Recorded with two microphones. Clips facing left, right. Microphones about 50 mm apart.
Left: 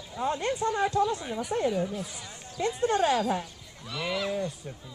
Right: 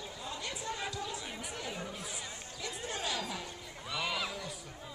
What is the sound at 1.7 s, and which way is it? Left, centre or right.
Speech, centre.